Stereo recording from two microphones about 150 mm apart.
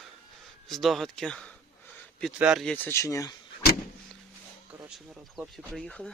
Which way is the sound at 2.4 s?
5° right (ahead or behind).